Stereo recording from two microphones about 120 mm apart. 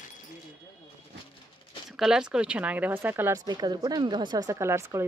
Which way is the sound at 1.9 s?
5° right (ahead or behind).